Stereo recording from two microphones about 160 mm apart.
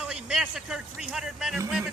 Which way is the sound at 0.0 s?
5° right (ahead or behind).